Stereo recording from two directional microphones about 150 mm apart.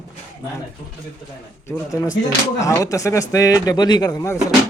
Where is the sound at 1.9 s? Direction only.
25° left (ahead or behind).